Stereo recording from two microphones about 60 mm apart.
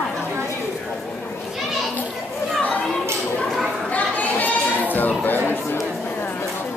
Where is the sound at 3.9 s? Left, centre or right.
Left.